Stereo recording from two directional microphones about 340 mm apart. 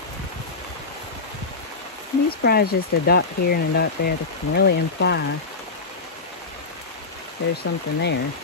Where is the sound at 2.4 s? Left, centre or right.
Left.